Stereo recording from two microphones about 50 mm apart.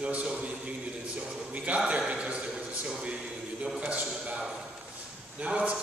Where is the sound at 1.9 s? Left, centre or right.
Right.